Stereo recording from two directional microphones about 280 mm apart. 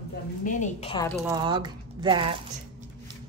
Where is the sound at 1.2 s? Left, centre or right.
Centre.